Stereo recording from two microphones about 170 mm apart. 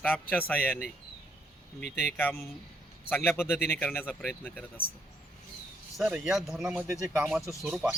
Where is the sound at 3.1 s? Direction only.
10° left (ahead or behind).